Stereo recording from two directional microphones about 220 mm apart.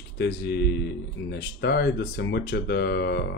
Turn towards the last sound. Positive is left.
turn(degrees=45)  # may be behind; listen again after turning